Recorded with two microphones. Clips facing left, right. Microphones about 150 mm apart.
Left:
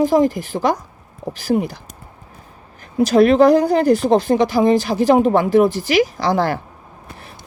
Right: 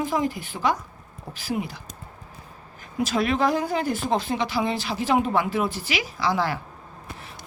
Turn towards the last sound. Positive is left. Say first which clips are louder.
# left 6 dB
turn(degrees=45)  # may be behind; listen again after turning